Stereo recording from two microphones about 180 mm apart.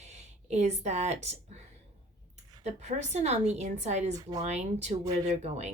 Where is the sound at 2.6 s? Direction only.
40° right (ahead or behind).